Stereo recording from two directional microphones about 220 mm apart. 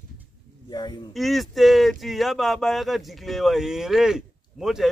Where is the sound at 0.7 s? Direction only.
20° left (ahead or behind).